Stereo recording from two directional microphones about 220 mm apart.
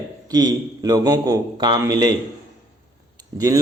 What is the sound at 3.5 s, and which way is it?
Speech, 15° right (ahead or behind).